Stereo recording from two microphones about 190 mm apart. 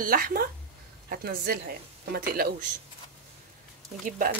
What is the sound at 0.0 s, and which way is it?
A woman's voice, 50° right (ahead or behind).